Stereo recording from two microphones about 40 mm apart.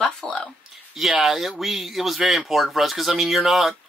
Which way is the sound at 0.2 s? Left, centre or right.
Centre.